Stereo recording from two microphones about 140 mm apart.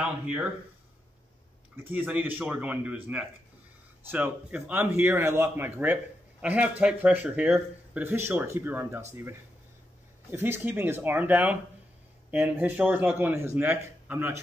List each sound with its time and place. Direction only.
0.0 s speech: 10° right (ahead or behind)
1.8 s speech: 15° right (ahead or behind)